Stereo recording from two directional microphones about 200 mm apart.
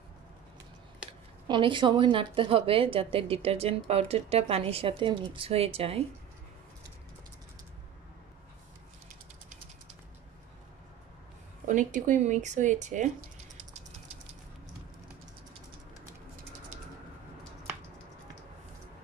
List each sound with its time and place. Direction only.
1.5 s a woman's voice: 25° right (ahead or behind)
11.6 s speech: 40° right (ahead or behind)